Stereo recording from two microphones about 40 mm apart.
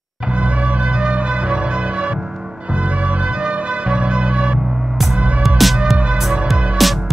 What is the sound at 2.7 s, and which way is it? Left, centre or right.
Music, right.